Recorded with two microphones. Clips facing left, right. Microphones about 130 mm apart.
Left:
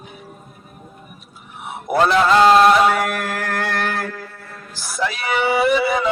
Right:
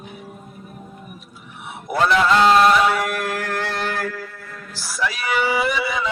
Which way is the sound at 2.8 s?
50° left (ahead or behind).